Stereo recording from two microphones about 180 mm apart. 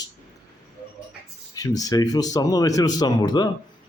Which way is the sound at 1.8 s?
20° left (ahead or behind).